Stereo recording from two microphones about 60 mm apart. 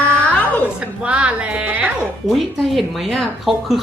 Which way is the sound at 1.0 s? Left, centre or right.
Centre.